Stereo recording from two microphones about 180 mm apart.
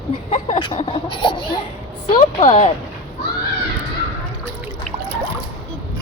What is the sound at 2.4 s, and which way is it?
Speech, 40° left (ahead or behind).